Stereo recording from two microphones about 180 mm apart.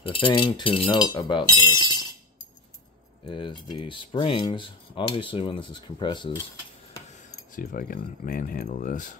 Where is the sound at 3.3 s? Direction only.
30° left (ahead or behind).